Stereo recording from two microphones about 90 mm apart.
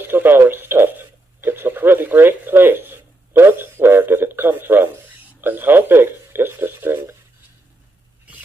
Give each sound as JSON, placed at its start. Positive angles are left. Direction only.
{"t": 0.0, "sound": "radio", "side_deg": -25}